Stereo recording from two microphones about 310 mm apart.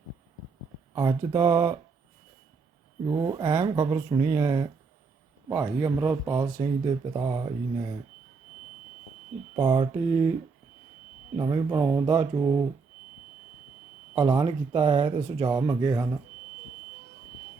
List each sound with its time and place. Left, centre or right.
0.9 s speech: centre
3.1 s speech: centre
9.6 s speech: centre
11.3 s speech: centre
14.2 s speech: centre